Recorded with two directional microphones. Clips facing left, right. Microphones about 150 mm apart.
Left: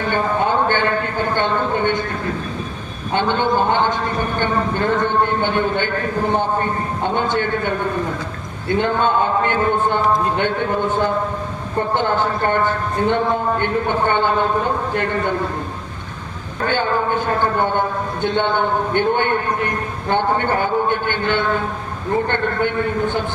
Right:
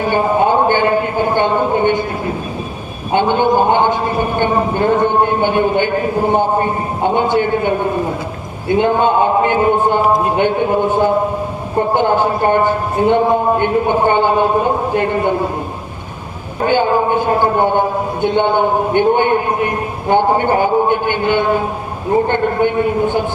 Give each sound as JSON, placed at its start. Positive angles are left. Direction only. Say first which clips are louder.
{"t": 0.0, "sound": "a sound", "louder": "right 5 dB", "side_deg": -15}
{"t": 3.1, "sound": "a man's voice", "louder": "right 5 dB", "side_deg": -15}
{"t": 11.8, "sound": "a man's voice", "louder": "right 5 dB", "side_deg": -15}
{"t": 16.6, "sound": "a man's voice", "louder": "right 6 dB", "side_deg": -15}